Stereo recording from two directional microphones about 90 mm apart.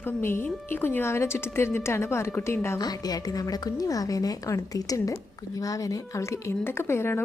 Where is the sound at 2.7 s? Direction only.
45° left (ahead or behind).